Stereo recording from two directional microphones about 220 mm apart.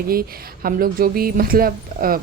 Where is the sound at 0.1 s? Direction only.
40° right (ahead or behind).